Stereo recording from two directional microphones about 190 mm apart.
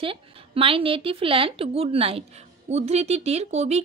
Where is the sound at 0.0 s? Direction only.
30° right (ahead or behind).